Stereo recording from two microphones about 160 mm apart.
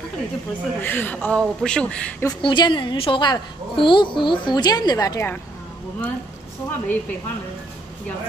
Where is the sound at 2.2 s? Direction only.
30° left (ahead or behind).